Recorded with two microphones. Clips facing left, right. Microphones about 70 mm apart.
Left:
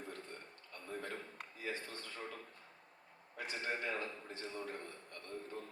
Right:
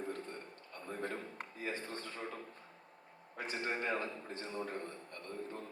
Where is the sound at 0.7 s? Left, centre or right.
Right.